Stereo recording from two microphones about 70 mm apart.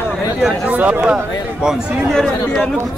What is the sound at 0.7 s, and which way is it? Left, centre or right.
Speech, right.